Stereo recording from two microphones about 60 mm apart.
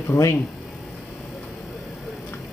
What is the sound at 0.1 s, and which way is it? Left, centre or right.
Speech, left.